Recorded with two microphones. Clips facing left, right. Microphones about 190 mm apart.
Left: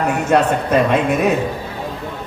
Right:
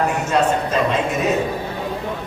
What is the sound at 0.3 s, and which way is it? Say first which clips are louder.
Speech: left 6 dB; 60° left (ahead or behind).